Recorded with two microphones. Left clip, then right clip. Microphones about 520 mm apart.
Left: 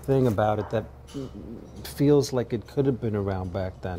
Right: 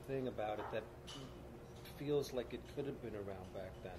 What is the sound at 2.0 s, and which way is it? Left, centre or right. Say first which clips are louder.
Speech: left 18 dB; left.